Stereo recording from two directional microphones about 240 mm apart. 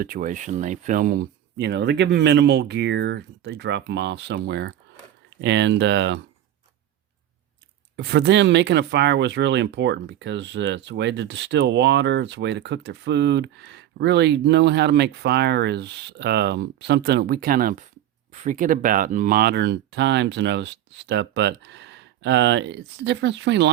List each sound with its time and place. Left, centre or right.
0.0 s speech: right
7.9 s speech: right